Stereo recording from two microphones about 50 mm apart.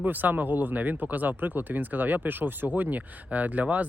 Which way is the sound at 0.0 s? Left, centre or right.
Right.